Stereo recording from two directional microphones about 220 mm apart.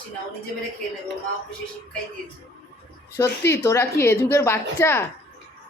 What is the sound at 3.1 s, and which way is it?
A woman's voice, 10° left (ahead or behind).